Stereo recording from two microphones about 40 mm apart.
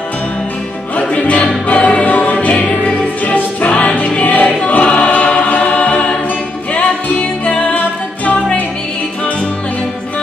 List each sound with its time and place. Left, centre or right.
1.2 s music: left
4.1 s choir: left
7.4 s music: left